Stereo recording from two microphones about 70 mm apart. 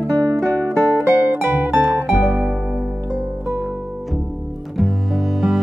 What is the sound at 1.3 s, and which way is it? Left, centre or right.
Music, right.